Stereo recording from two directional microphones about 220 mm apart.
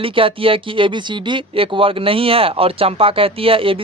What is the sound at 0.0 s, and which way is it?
Speech, 25° right (ahead or behind).